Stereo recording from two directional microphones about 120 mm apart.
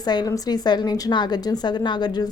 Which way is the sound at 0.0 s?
35° left (ahead or behind).